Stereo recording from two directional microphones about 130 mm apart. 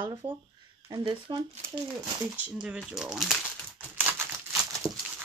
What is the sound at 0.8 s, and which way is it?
Speech, 40° right (ahead or behind).